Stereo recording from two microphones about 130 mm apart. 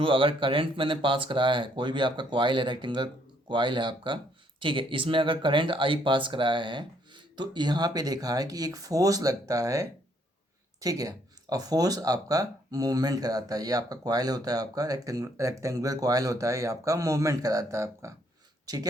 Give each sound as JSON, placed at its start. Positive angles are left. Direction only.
{"t": 0.0, "sound": "speech", "side_deg": -40}